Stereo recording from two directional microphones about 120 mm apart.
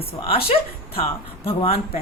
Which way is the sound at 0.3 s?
50° left (ahead or behind).